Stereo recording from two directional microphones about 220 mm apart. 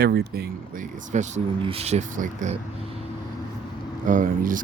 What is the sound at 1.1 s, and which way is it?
Speech, 30° right (ahead or behind).